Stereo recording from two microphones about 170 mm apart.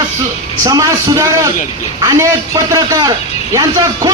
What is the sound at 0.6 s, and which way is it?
A man's voice, 20° right (ahead or behind).